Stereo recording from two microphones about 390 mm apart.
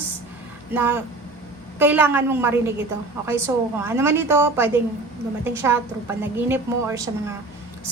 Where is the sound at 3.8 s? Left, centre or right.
Centre.